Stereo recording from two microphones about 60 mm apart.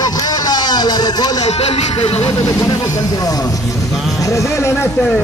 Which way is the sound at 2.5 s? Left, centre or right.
Left.